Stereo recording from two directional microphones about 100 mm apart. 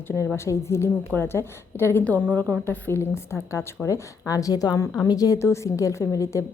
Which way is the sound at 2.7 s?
25° left (ahead or behind).